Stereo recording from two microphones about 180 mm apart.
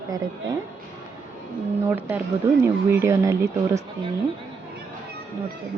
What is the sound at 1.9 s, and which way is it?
Speech, 10° right (ahead or behind).